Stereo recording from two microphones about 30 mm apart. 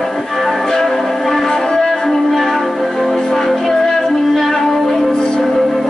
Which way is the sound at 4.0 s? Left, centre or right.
Centre.